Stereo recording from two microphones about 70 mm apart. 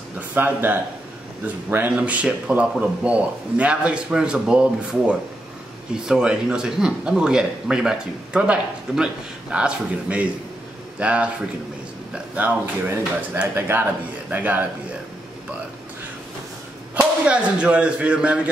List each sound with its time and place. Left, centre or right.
0.3 s speech: right
1.9 s a man's voice: centre
17.3 s speech: centre